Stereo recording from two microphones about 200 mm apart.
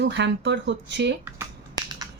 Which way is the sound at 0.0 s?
60° right (ahead or behind).